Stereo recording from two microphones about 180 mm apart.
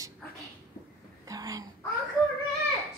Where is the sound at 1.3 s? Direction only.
20° right (ahead or behind).